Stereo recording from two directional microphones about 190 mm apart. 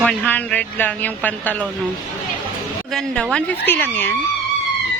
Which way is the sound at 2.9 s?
Centre (ahead or behind).